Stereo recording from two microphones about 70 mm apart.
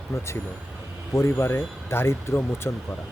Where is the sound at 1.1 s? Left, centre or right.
Left.